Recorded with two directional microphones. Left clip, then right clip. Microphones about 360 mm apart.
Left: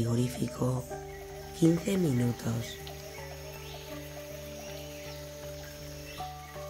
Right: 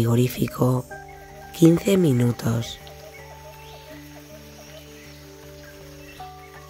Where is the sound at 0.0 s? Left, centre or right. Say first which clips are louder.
Right 10 dB; right.